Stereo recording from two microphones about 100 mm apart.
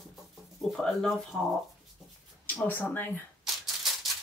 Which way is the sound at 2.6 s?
20° left (ahead or behind).